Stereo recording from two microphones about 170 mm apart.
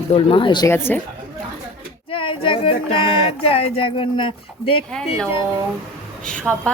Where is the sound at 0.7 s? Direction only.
10° left (ahead or behind).